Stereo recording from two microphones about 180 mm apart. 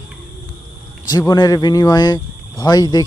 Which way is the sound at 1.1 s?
20° left (ahead or behind).